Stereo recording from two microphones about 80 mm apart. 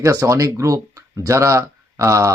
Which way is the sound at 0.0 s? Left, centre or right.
Right.